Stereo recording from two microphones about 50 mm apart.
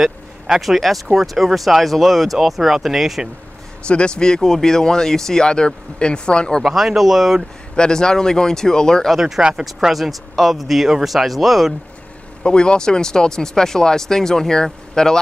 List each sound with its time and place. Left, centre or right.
0.0 s speech: centre
3.8 s speech: centre
6.6 s speech: centre
7.7 s speech: centre
9.1 s speech: centre
12.4 s speech: centre